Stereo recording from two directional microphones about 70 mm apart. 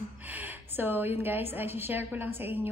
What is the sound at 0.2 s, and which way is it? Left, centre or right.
A woman's voice, right.